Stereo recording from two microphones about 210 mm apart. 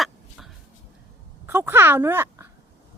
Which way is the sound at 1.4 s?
10° right (ahead or behind).